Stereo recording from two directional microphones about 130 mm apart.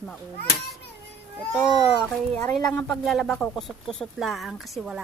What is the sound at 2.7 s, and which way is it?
Speech, 10° left (ahead or behind).